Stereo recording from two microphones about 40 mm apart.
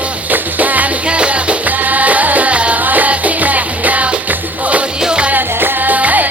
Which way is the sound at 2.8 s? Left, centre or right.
Right.